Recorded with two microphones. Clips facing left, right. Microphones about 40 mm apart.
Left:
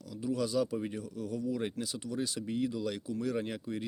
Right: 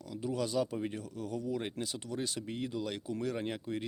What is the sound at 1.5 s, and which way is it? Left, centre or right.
Speech, right.